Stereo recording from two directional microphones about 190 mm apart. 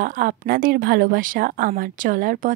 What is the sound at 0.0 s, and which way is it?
Speech, 45° right (ahead or behind).